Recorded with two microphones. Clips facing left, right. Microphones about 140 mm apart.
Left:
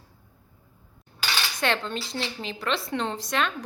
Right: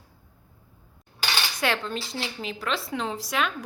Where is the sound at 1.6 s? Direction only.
5° right (ahead or behind).